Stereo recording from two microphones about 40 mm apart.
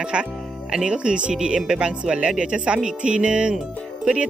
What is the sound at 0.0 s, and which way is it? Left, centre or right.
Speech, right.